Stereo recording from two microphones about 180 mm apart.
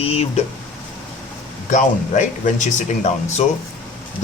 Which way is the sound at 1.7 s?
45° left (ahead or behind).